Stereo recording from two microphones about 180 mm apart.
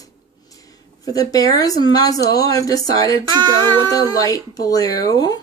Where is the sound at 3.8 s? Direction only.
20° left (ahead or behind).